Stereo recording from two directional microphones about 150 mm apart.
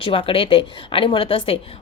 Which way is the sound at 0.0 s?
35° left (ahead or behind).